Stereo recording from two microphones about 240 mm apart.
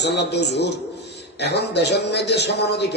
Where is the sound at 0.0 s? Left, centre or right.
Left.